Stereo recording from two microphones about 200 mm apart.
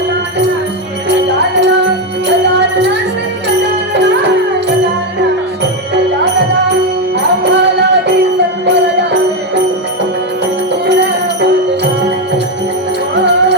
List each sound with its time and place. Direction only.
2.2 s music: 60° right (ahead or behind)
7.2 s music: 60° right (ahead or behind)
10.8 s music: 55° right (ahead or behind)
13.1 s music: 60° right (ahead or behind)